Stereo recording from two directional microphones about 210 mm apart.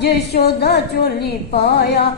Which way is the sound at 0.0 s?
50° left (ahead or behind).